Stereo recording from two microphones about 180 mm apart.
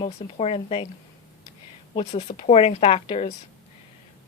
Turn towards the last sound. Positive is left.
turn(degrees=35)  # may be behind; listen again after turning